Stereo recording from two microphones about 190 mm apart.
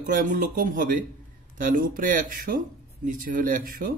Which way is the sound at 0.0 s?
45° right (ahead or behind).